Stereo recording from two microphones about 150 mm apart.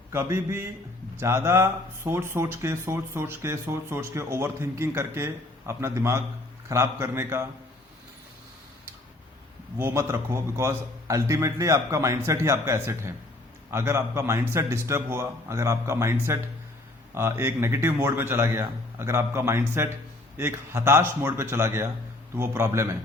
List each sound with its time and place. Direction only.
0.1 s speech: 15° right (ahead or behind)
9.7 s a man's voice: 15° right (ahead or behind)